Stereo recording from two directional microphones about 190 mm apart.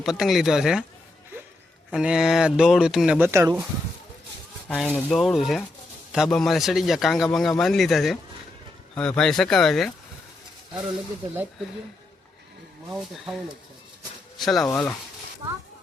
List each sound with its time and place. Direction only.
0.0 s speech: centre (ahead or behind)
1.9 s speech: 5° right (ahead or behind)
4.7 s speech: 5° left (ahead or behind)
12.9 s speech: centre (ahead or behind)